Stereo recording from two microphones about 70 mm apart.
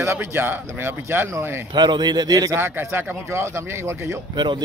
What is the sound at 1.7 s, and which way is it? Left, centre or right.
Speech, right.